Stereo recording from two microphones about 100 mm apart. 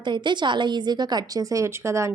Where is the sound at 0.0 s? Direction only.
50° right (ahead or behind).